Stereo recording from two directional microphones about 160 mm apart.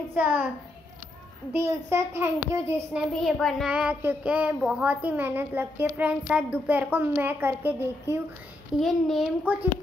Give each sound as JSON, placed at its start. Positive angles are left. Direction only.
{"t": 0.1, "sound": "a child's voice", "side_deg": -10}
{"t": 1.6, "sound": "a child's voice", "side_deg": -15}
{"t": 3.1, "sound": "a child's voice", "side_deg": 0}
{"t": 8.7, "sound": "speech", "side_deg": 0}
{"t": 9.4, "sound": "a child's voice", "side_deg": -10}